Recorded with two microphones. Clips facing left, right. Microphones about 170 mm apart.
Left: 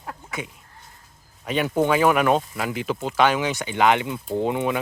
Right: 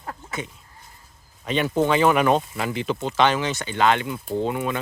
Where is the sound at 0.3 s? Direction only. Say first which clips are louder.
Right 1 dB; 10° left (ahead or behind).